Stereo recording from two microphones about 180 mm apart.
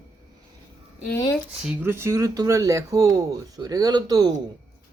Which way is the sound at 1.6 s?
10° right (ahead or behind).